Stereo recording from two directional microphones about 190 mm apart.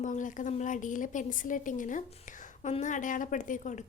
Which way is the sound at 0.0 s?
40° left (ahead or behind).